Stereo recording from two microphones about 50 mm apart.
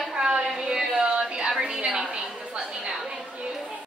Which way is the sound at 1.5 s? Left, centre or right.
Centre.